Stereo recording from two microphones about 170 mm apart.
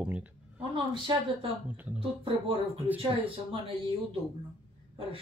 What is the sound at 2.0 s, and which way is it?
Speech, 30° right (ahead or behind).